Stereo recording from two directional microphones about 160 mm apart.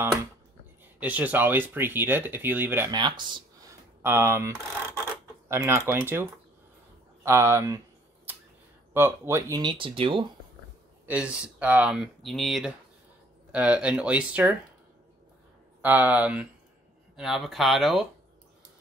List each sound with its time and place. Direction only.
0.9 s speech: 10° right (ahead or behind)
2.9 s speech: 30° right (ahead or behind)
4.0 s speech: 15° right (ahead or behind)
5.5 s speech: 15° right (ahead or behind)
7.2 s speech: 15° right (ahead or behind)
8.9 s speech: 15° right (ahead or behind)
9.6 s speech: 30° right (ahead or behind)
11.1 s speech: 5° right (ahead or behind)
15.8 s speech: 10° right (ahead or behind)